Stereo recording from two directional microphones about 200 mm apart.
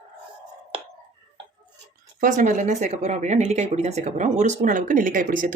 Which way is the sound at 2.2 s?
40° right (ahead or behind).